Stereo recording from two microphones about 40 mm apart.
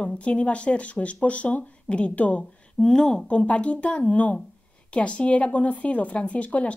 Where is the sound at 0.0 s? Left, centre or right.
Left.